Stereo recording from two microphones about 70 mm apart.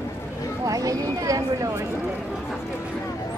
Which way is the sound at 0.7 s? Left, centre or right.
Right.